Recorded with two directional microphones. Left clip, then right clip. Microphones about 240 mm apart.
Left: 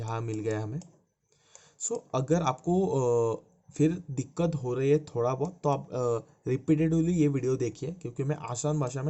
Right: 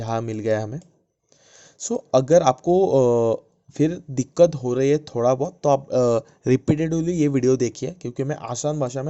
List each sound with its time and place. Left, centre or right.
0.0 s speech: right